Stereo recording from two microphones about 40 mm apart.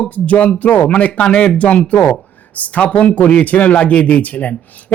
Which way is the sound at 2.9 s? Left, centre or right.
Left.